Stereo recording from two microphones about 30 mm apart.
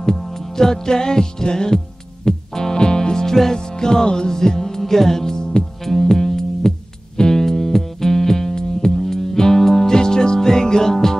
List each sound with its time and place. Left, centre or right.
0.2 s music: centre; by 4.4 s left
4.4 s music: centre